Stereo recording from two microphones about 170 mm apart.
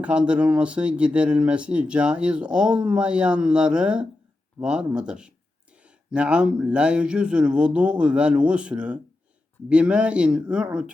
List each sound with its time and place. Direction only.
0.0 s speech: 5° right (ahead or behind)